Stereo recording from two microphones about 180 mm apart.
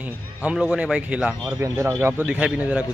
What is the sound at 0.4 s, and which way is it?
A man's voice, 5° right (ahead or behind).